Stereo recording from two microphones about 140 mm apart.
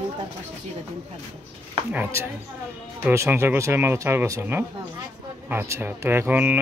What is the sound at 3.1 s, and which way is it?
Speech, 15° right (ahead or behind).